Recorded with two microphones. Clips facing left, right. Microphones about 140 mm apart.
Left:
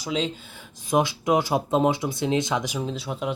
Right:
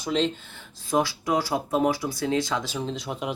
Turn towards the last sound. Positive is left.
turn(degrees=0)  # may be behind; listen again after turning